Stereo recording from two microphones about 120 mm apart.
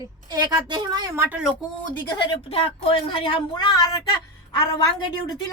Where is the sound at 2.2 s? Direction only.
50° left (ahead or behind).